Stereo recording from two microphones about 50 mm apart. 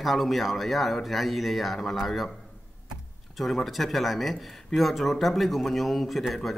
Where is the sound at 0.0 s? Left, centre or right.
Centre.